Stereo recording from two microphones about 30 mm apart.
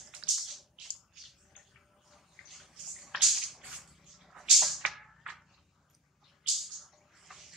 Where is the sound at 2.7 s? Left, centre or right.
Centre.